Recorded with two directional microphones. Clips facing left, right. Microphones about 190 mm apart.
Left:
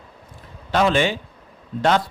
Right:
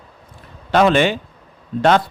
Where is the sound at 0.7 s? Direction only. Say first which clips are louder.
Right 4 dB; 60° right (ahead or behind).